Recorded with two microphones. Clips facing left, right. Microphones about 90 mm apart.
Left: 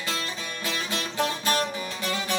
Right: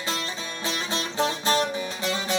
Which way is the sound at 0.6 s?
25° right (ahead or behind).